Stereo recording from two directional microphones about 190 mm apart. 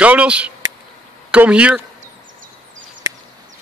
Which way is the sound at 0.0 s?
5° right (ahead or behind).